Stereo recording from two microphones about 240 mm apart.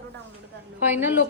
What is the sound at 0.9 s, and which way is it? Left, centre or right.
Speech, centre.